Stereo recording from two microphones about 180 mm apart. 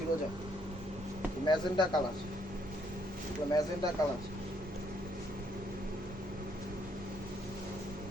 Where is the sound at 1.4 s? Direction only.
25° left (ahead or behind).